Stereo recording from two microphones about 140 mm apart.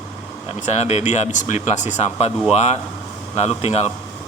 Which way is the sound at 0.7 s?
50° left (ahead or behind).